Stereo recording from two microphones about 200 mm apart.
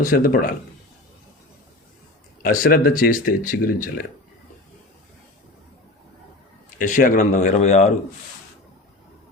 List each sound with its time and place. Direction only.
0.0 s speech: 45° left (ahead or behind)
2.4 s speech: 45° left (ahead or behind)
6.7 s speech: 40° left (ahead or behind)